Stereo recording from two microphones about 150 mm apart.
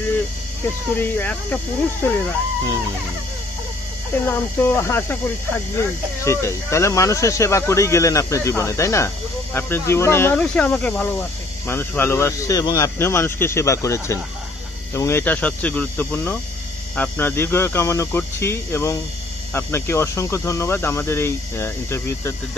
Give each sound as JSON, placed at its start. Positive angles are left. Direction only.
{"t": 0.9, "sound": "speech", "side_deg": 15}
{"t": 4.3, "sound": "speech", "side_deg": 15}